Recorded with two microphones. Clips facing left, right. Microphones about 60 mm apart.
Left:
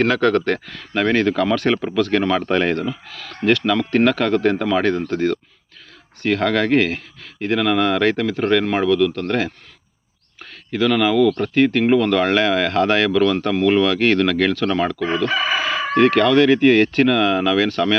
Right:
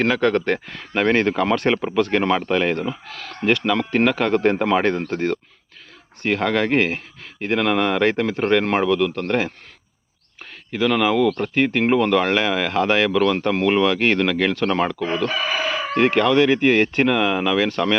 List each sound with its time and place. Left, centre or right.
0.0 s speech: centre
2.5 s speech: centre
2.7 s speech: right
6.2 s speech: centre
10.7 s speech: centre